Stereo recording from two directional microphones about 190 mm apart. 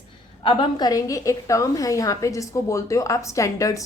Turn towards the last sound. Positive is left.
turn(degrees=15)  # may be behind; listen again after turning